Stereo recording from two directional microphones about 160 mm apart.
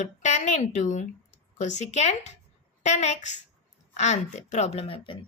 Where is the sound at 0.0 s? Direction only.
45° left (ahead or behind).